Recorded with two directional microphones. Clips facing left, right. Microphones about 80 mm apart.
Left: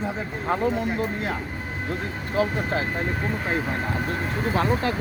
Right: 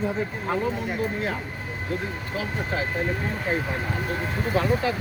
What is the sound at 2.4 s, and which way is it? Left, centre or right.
Speech, left.